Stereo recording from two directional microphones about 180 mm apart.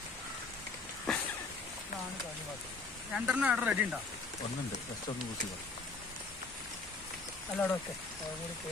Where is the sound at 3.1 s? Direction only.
5° right (ahead or behind).